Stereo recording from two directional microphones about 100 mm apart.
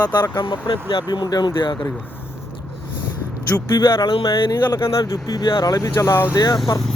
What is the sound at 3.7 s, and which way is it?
Speech, 50° left (ahead or behind).